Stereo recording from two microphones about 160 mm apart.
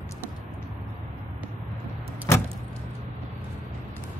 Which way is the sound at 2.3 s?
15° left (ahead or behind).